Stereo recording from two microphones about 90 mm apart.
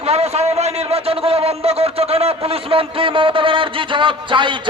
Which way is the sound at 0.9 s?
90° right.